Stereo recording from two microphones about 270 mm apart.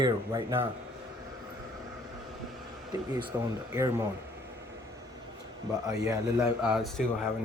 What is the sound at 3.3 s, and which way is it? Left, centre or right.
Speech, centre.